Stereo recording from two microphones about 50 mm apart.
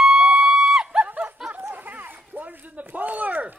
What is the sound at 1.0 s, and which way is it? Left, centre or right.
Snicker, right.